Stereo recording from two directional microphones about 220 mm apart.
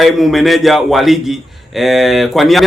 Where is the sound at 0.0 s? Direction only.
Centre (ahead or behind).